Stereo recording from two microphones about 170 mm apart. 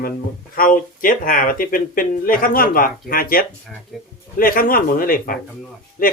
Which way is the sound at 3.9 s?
Centre (ahead or behind).